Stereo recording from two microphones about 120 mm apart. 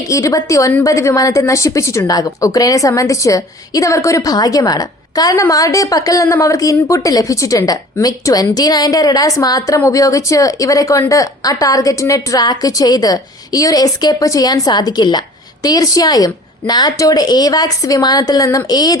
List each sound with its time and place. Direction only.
0.0 s a woman's voice: 30° left (ahead or behind)